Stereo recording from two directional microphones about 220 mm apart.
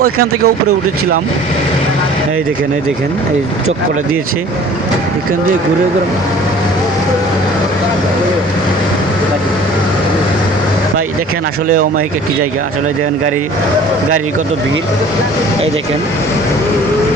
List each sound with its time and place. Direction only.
0.0 s speech: 85° right